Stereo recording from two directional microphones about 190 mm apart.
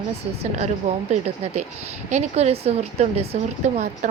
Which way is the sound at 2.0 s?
35° right (ahead or behind).